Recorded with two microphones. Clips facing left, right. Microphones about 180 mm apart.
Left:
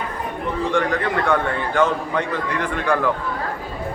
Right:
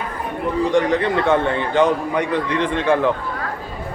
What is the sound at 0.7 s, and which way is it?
A man's voice, 20° right (ahead or behind).